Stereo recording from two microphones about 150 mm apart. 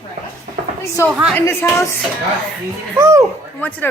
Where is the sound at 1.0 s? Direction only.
20° left (ahead or behind).